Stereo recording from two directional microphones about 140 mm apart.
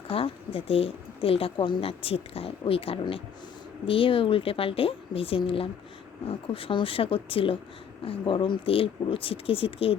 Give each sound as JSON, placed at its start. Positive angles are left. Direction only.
{"t": 0.1, "sound": "speech", "side_deg": 40}